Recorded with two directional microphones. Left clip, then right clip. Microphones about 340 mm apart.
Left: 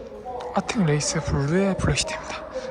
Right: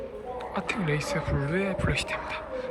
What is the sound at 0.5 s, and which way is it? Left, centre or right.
Speech, centre.